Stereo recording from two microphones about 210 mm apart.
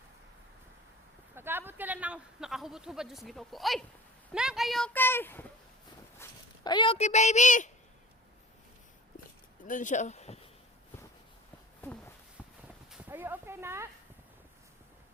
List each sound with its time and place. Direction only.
1.4 s speech: 10° right (ahead or behind); by 5.5 s 10° left (ahead or behind)
6.7 s a woman's voice: 25° left (ahead or behind)
9.6 s a woman's voice: 35° left (ahead or behind)
12.9 s speech: 10° right (ahead or behind)